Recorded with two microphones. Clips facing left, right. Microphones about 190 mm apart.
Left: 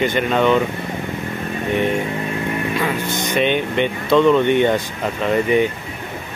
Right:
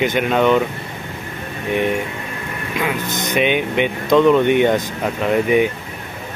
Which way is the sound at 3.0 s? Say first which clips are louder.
Left 1 dB; 40° right (ahead or behind).